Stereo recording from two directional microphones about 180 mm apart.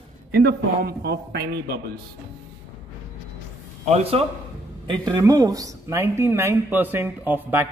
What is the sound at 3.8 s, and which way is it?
Speech, 35° right (ahead or behind).